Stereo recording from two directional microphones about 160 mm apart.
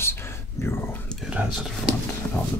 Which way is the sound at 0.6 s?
20° left (ahead or behind).